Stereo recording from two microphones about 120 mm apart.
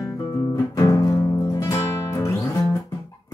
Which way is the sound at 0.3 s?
25° left (ahead or behind).